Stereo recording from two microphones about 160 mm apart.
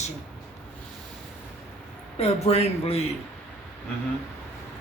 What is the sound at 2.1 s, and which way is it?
Speech, 40° left (ahead or behind).